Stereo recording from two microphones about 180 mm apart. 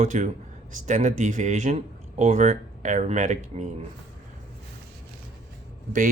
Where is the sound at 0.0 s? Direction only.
40° right (ahead or behind).